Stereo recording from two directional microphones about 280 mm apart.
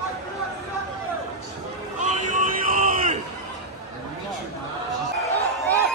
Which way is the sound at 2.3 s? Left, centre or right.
Right.